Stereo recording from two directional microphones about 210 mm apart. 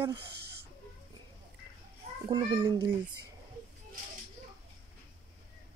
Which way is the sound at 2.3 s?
20° right (ahead or behind).